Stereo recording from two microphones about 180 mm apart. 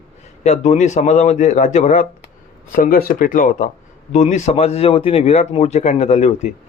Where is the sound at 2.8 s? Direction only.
50° left (ahead or behind).